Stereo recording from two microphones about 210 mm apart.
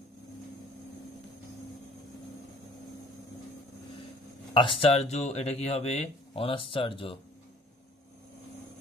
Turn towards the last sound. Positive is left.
turn(degrees=25)  # may be behind; listen again after turning